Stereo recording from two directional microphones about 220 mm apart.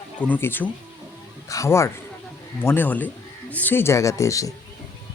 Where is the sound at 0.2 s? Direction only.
10° left (ahead or behind).